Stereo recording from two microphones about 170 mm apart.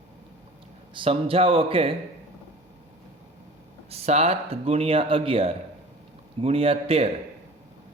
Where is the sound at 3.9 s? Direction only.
40° right (ahead or behind).